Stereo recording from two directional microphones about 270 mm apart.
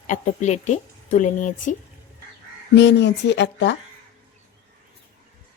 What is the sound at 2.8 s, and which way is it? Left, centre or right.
Speech, left.